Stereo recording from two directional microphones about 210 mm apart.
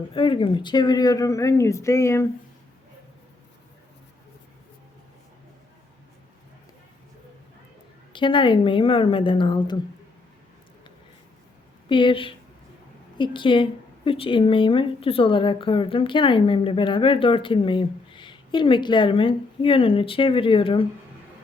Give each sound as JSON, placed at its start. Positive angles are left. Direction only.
{"t": 0.1, "sound": "speech", "side_deg": 25}
{"t": 8.1, "sound": "a woman's voice", "side_deg": 20}
{"t": 11.9, "sound": "a woman's voice", "side_deg": 25}